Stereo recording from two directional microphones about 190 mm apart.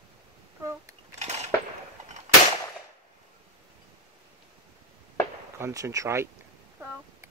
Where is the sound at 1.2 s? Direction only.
35° right (ahead or behind).